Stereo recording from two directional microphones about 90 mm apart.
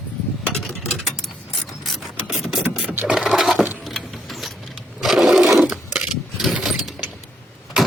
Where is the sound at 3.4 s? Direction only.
Centre (ahead or behind).